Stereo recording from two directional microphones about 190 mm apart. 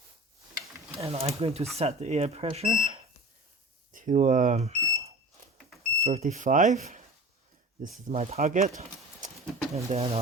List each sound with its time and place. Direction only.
1.0 s speech: 30° right (ahead or behind)
3.9 s smoke detector: 40° right (ahead or behind)
5.9 s speech: 35° right (ahead or behind)